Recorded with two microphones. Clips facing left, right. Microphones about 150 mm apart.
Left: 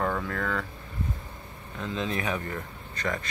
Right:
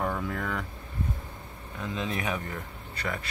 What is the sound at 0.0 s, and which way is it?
Speech, 10° right (ahead or behind).